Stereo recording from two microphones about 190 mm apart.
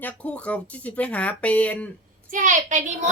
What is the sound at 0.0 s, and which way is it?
Speech, 5° left (ahead or behind).